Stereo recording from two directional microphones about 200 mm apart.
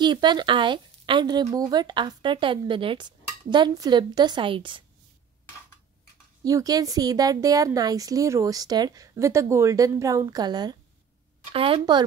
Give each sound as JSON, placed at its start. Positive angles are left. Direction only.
{"t": 0.0, "sound": "speech", "side_deg": -20}
{"t": 6.4, "sound": "a woman's voice", "side_deg": -20}